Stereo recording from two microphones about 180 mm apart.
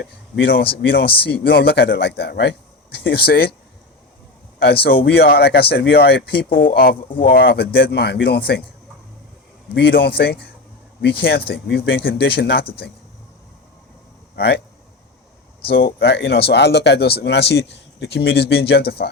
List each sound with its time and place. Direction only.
0.0 s speech: 65° left (ahead or behind)
4.6 s speech: 60° left (ahead or behind)
7.1 s speech: 30° left (ahead or behind)
7.3 s speech: 60° left (ahead or behind)
9.7 s speech: 60° left (ahead or behind)
14.3 s speech: 60° left (ahead or behind)
15.7 s speech: 60° left (ahead or behind)